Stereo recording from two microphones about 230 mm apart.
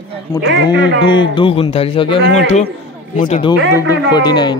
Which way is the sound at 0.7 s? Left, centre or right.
Left.